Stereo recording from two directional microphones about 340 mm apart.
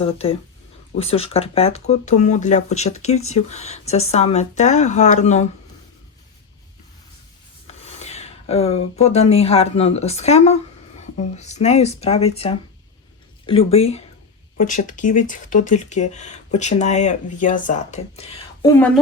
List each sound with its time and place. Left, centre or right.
0.0 s speech: centre
7.7 s speech: centre